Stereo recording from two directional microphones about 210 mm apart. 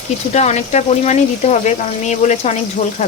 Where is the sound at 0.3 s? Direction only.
35° left (ahead or behind).